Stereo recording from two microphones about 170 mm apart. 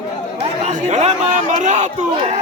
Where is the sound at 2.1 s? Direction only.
30° right (ahead or behind).